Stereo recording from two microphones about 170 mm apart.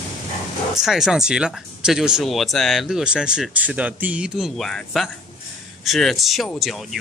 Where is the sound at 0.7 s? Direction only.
5° right (ahead or behind).